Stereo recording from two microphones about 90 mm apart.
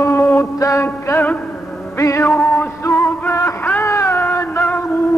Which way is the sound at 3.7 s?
25° left (ahead or behind).